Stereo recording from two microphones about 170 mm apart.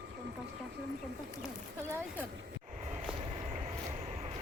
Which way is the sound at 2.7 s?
45° right (ahead or behind).